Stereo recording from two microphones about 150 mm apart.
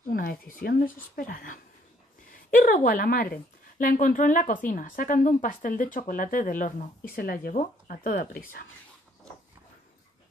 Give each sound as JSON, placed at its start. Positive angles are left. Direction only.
{"t": 0.0, "sound": "a woman's voice", "side_deg": 70}